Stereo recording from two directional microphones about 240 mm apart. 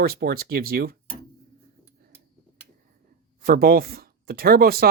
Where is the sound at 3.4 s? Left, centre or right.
Right.